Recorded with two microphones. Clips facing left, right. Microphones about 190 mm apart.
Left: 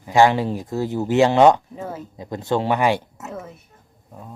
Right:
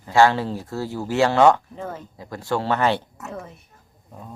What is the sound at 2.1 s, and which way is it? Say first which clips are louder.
Speech: left 4 dB; 20° left (ahead or behind).